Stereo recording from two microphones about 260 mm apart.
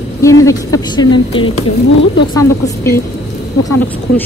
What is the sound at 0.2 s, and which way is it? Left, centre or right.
Speech, centre.